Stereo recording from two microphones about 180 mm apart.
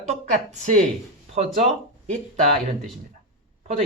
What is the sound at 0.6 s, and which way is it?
Speech, 45° right (ahead or behind).